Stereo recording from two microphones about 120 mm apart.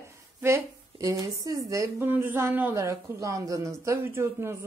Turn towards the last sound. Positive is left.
turn(degrees=-20)  # may be behind; listen again after turning